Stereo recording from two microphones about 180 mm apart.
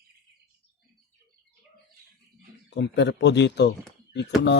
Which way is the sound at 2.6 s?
75° left (ahead or behind).